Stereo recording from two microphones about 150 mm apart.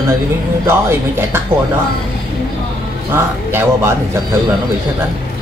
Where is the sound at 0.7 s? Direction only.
15° right (ahead or behind).